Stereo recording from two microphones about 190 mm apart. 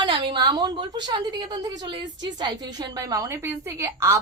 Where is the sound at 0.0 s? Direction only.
25° right (ahead or behind).